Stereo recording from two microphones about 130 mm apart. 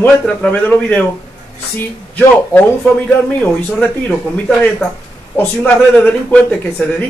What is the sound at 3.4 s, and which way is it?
Speech, 10° left (ahead or behind).